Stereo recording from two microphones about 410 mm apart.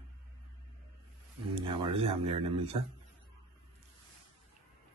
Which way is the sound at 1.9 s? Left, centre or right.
Centre.